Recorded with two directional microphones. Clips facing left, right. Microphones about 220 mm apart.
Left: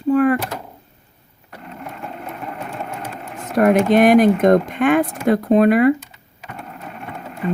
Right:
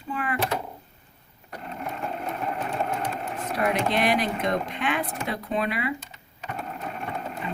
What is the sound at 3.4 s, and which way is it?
Speech, 45° left (ahead or behind).